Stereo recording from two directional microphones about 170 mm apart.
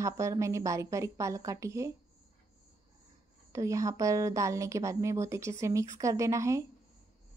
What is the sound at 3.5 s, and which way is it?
Speech, 20° right (ahead or behind).